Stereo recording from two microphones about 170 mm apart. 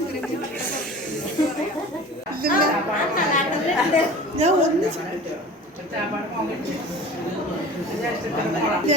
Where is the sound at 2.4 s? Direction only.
60° right (ahead or behind).